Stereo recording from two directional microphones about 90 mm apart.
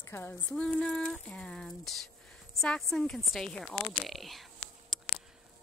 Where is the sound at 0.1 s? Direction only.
20° left (ahead or behind).